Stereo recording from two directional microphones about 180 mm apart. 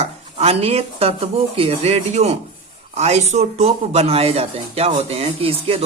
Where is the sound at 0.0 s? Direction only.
35° right (ahead or behind).